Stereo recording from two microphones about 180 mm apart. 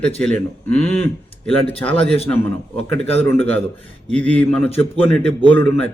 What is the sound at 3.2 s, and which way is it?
A man's voice, 10° left (ahead or behind).